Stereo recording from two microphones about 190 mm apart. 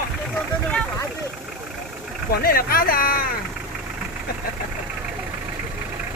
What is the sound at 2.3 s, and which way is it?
Speech, 50° left (ahead or behind).